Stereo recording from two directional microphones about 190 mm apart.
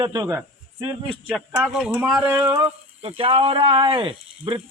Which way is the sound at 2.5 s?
30° right (ahead or behind).